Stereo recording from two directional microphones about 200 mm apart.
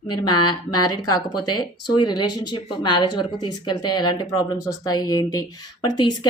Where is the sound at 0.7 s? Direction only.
20° left (ahead or behind).